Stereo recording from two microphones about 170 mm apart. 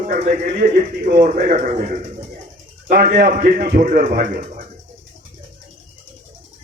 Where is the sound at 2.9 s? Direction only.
55° right (ahead or behind).